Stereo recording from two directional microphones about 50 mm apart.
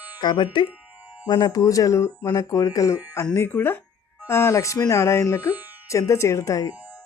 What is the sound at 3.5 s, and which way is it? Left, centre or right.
Speech, left.